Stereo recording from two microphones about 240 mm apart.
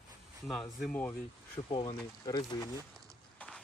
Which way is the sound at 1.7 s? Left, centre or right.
Centre.